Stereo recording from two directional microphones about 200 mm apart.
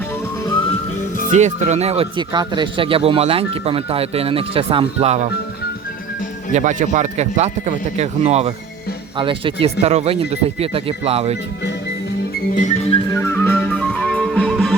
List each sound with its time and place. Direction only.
1.3 s speech: 35° right (ahead or behind)
6.5 s speech: 40° right (ahead or behind)
12.5 s music: 35° left (ahead or behind)
13.1 s music: 15° left (ahead or behind)